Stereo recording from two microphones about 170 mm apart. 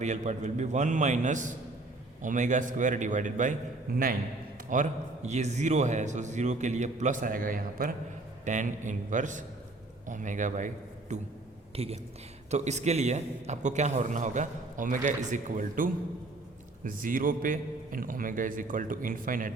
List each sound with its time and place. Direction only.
0.0 s a man's voice: 45° right (ahead or behind)
3.9 s a man's voice: 60° right (ahead or behind)
4.7 s a man's voice: 45° right (ahead or behind)